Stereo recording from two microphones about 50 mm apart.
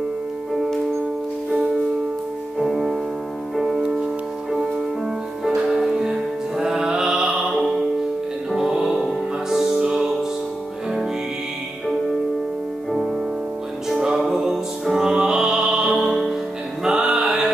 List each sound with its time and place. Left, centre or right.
2.6 s music: centre
5.4 s music: centre
13.8 s music: centre